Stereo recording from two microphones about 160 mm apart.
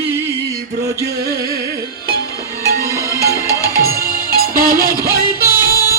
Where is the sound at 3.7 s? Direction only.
70° right (ahead or behind).